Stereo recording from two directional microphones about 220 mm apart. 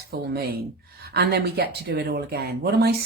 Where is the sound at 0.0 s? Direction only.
45° right (ahead or behind).